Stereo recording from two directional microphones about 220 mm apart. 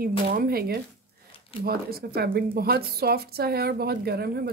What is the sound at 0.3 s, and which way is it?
A woman's voice, 45° right (ahead or behind).